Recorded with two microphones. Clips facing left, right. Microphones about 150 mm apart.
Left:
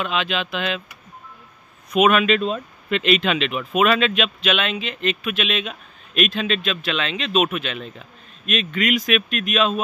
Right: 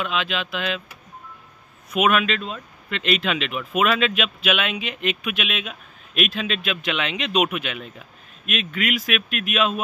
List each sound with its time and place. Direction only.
0.0 s speech: centre (ahead or behind)
1.9 s speech: 5° right (ahead or behind)
2.4 s speech: 25° left (ahead or behind)
3.0 s speech: centre (ahead or behind)